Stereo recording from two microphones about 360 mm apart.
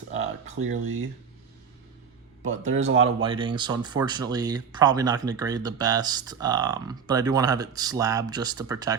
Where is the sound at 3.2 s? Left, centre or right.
Centre.